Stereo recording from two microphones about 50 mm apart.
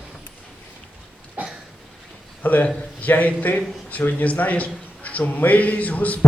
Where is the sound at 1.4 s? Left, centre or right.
Right.